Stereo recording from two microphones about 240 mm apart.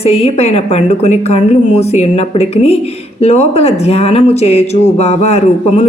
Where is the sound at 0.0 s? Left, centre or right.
Left.